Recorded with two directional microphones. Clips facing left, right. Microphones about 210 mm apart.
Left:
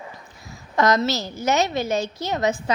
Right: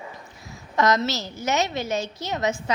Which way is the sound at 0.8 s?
35° left (ahead or behind).